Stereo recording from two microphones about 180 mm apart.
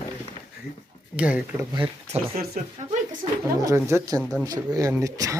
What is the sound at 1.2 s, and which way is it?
Speech, 5° right (ahead or behind).